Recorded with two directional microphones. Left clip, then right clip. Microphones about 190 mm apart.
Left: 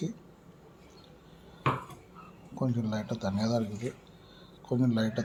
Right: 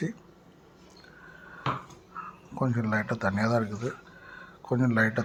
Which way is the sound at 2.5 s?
35° right (ahead or behind).